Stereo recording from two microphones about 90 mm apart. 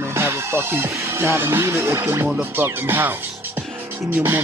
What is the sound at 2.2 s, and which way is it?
Music, 20° right (ahead or behind).